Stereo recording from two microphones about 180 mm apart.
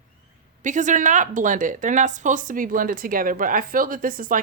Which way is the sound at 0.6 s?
45° right (ahead or behind).